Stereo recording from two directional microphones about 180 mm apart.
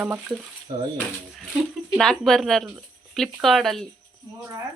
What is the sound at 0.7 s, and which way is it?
Speech, 25° right (ahead or behind).